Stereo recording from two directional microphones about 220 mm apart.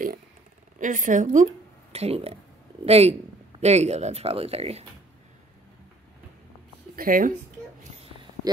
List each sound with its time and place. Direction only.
0.7 s speech: 35° right (ahead or behind)
7.0 s speech: 40° right (ahead or behind)